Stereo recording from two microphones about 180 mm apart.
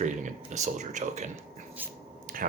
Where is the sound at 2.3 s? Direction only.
50° right (ahead or behind).